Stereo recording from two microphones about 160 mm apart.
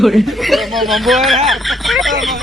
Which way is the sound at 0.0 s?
Centre (ahead or behind).